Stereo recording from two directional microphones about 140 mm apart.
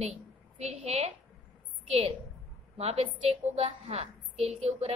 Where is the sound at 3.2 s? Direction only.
45° right (ahead or behind).